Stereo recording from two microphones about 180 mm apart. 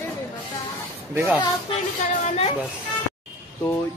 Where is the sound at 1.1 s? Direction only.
15° right (ahead or behind).